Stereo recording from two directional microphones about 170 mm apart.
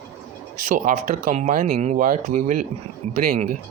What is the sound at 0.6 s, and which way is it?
Speech, 50° right (ahead or behind).